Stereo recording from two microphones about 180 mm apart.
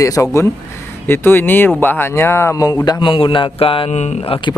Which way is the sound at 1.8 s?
10° left (ahead or behind).